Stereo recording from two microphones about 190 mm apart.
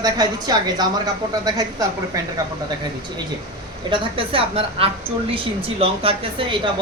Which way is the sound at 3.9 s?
25° right (ahead or behind).